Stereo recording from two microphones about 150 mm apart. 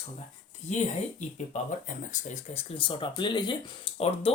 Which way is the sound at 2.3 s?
40° left (ahead or behind).